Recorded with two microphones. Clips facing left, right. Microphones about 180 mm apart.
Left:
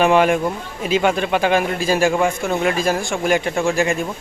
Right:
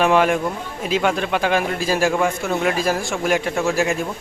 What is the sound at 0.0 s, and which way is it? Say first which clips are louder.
Speech: left 2 dB; centre (ahead or behind).